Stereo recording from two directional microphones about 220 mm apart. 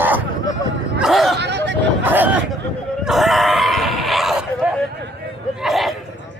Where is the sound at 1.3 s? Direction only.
50° right (ahead or behind).